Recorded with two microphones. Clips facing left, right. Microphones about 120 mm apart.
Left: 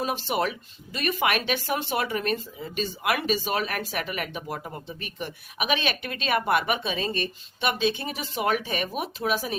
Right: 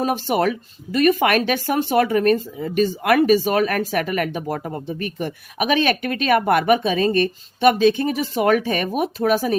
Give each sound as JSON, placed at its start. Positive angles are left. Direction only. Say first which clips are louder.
{"t": 0.0, "sound": "speech", "louder": "right 7 dB", "side_deg": -50}